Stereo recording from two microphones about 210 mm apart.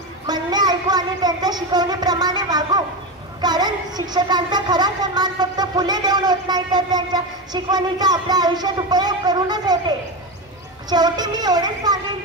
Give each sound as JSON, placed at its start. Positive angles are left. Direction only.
{"t": 0.3, "sound": "a woman's voice", "side_deg": -20}